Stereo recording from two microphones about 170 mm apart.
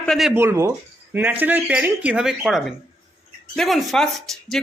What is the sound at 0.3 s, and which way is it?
Speech, 15° right (ahead or behind).